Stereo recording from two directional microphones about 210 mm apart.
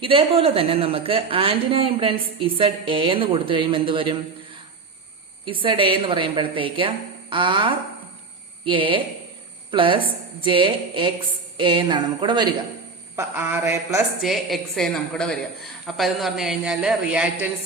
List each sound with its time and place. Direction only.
0.0 s a woman's voice: 25° right (ahead or behind)
5.5 s a woman's voice: 25° right (ahead or behind)
13.1 s a woman's voice: 10° right (ahead or behind)